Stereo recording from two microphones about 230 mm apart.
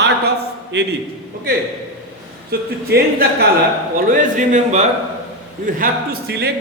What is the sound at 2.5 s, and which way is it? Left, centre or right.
Speech, right.